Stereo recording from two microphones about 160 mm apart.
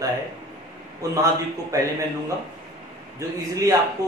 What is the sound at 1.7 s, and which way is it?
Speech, 20° right (ahead or behind).